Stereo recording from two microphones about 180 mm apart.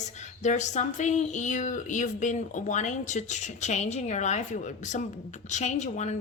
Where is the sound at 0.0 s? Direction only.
40° left (ahead or behind).